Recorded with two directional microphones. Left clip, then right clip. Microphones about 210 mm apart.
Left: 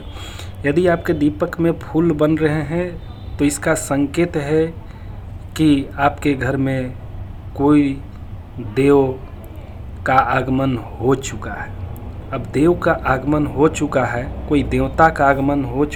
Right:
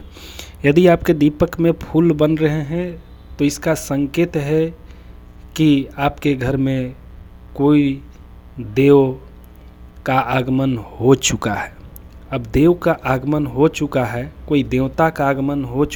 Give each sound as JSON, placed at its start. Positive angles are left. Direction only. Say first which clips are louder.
{"t": 0.2, "sound": "a man's voice", "louder": "right 4 dB", "side_deg": -45}
{"t": 11.4, "sound": "a man's voice", "louder": "right 6 dB", "side_deg": -60}